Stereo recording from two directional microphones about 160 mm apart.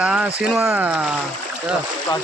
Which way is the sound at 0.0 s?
5° right (ahead or behind).